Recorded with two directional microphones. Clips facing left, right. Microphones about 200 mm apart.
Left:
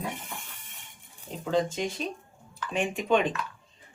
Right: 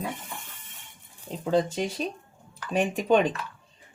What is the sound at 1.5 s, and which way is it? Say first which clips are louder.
Speech: right 2 dB; 40° right (ahead or behind).